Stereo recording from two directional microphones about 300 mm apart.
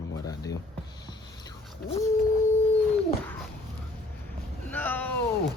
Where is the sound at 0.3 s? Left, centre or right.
Centre.